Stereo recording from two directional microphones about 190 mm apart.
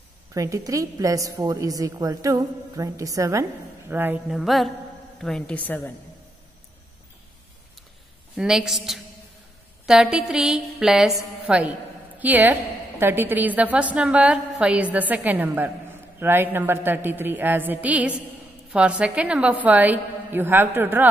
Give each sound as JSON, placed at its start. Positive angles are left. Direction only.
{"t": 0.3, "sound": "a woman's voice", "side_deg": -15}
{"t": 8.4, "sound": "a woman's voice", "side_deg": -5}